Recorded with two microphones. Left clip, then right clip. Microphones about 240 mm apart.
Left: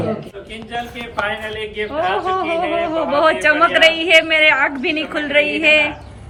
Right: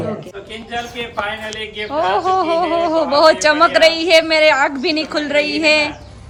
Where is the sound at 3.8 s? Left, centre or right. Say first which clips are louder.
Left 2 dB; right.